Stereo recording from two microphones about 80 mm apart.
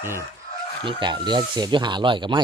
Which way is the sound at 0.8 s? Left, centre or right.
Right.